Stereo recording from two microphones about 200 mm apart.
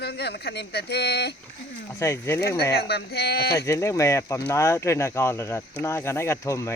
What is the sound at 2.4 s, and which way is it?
Speech, 50° left (ahead or behind).